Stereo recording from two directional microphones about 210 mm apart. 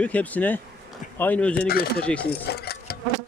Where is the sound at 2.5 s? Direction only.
50° left (ahead or behind).